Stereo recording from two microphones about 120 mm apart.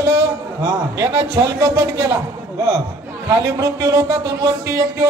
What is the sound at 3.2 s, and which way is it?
Speech, 25° right (ahead or behind).